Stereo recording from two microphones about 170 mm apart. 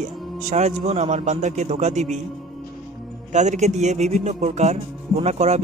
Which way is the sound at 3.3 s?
45° right (ahead or behind).